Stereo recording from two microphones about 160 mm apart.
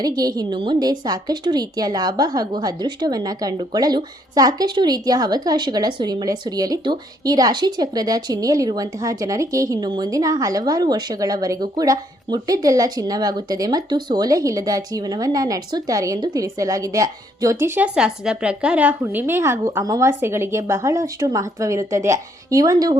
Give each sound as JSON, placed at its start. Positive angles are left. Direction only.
{"t": 0.0, "sound": "a woman's voice", "side_deg": -25}